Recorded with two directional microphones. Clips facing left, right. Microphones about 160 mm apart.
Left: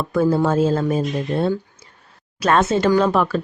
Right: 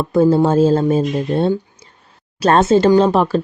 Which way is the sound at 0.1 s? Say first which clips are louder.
Right 5 dB; 25° right (ahead or behind).